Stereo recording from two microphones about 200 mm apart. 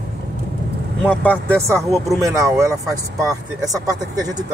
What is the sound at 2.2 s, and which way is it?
Speech, 15° right (ahead or behind).